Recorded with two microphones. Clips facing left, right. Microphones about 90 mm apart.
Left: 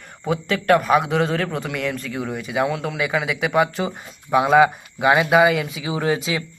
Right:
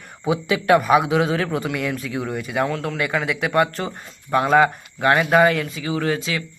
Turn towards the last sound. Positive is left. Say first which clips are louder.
# left 1 dB
turn(degrees=20)  # may be behind; listen again after turning